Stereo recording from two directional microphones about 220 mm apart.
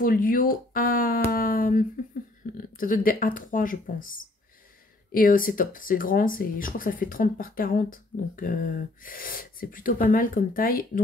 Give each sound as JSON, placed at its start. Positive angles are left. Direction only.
{"t": 0.0, "sound": "speech", "side_deg": 40}